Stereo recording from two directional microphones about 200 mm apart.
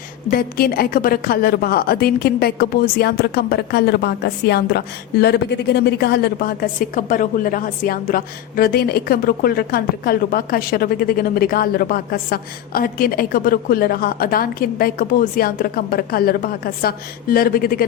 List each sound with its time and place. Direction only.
0.3 s a woman's voice: 50° left (ahead or behind)